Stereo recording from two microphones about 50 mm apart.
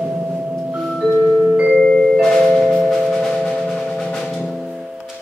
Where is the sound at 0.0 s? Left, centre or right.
Centre.